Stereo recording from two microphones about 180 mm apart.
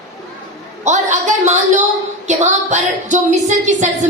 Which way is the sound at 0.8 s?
40° right (ahead or behind).